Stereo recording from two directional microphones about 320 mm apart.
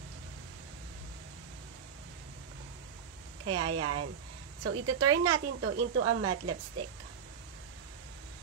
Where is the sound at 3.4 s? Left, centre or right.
Right.